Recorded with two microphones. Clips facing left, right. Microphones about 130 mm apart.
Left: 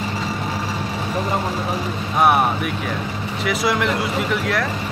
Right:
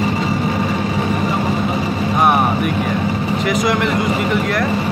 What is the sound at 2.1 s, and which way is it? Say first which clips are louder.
Vehicle: right 1 dB; centre (ahead or behind).